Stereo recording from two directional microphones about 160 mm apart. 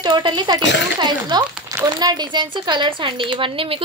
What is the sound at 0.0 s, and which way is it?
Speech, 30° right (ahead or behind).